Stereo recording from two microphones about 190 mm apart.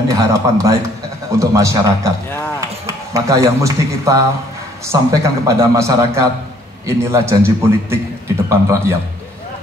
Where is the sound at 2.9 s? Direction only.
15° right (ahead or behind).